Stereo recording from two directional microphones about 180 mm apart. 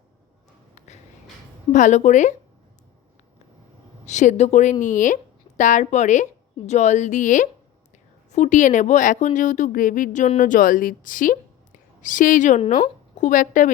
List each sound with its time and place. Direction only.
0.8 s a sound: 40° left (ahead or behind)
1.7 s a woman's voice: 40° left (ahead or behind)
4.0 s a woman's voice: 40° left (ahead or behind)